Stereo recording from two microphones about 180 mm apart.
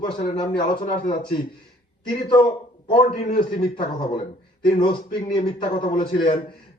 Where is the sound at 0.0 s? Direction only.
25° left (ahead or behind).